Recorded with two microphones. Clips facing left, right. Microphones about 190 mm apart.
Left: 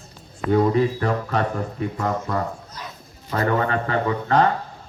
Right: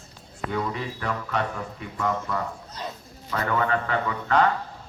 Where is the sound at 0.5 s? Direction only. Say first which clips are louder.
Left 12 dB; 40° left (ahead or behind).